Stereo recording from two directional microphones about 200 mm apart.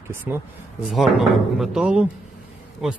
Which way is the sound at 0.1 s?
10° right (ahead or behind).